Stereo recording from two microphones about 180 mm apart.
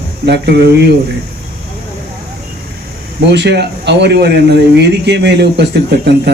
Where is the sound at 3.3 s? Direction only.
70° right (ahead or behind).